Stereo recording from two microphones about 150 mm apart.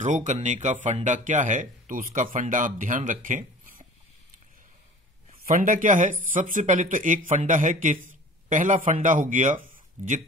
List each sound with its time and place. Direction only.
0.0 s speech: 55° right (ahead or behind)
5.5 s speech: 60° right (ahead or behind)